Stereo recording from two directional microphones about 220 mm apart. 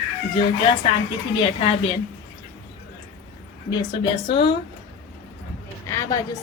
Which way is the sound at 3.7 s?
20° left (ahead or behind).